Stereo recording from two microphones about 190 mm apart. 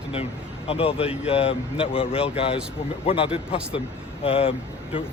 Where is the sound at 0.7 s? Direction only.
30° left (ahead or behind).